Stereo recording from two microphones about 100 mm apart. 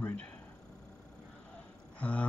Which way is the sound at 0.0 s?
15° left (ahead or behind).